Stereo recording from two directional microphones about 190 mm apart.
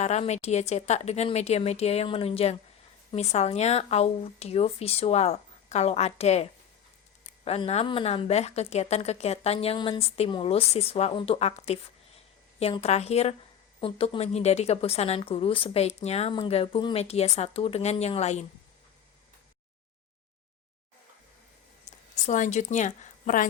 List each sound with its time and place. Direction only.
0.0 s a woman's voice: 35° left (ahead or behind)
21.9 s a sound: 40° left (ahead or behind)
22.3 s a woman's voice: 40° left (ahead or behind)